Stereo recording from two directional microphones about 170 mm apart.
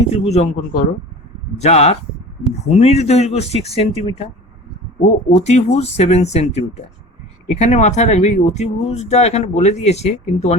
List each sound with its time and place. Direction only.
0.1 s speech: 40° left (ahead or behind)
5.3 s speech: 40° left (ahead or behind)